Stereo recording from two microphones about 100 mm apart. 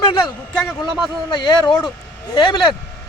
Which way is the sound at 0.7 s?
5° right (ahead or behind).